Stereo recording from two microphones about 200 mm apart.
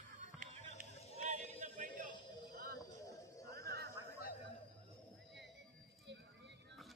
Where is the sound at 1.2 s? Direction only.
35° right (ahead or behind).